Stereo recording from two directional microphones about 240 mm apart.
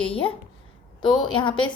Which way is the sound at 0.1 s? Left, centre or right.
Left.